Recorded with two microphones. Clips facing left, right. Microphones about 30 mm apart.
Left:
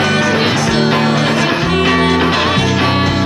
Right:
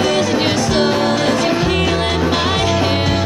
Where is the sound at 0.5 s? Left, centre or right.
Centre.